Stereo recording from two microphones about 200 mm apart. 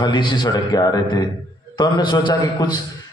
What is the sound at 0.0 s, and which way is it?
A man's voice, 20° left (ahead or behind).